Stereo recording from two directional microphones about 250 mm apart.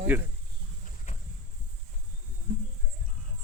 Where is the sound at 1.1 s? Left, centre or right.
Left.